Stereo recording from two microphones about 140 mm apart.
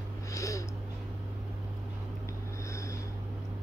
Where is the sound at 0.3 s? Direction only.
20° left (ahead or behind).